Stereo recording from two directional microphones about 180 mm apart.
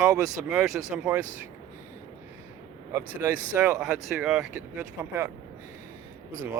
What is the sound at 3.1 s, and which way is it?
Speech, 10° right (ahead or behind).